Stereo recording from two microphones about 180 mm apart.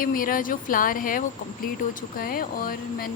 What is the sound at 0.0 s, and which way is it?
Speech, 50° left (ahead or behind).